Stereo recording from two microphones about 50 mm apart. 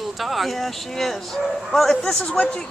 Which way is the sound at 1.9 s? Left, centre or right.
Left.